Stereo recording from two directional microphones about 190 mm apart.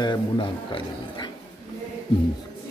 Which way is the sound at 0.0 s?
25° left (ahead or behind).